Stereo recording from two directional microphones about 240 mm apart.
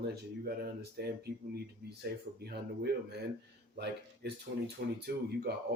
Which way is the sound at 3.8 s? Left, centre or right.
Right.